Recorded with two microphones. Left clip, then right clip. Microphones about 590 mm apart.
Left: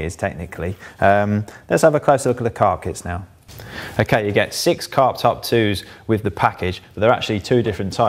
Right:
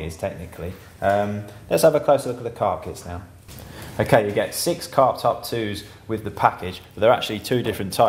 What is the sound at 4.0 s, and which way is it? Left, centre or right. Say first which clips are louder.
Speech: left 1 dB; left.